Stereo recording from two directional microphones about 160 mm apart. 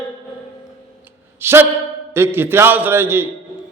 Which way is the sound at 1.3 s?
15° right (ahead or behind).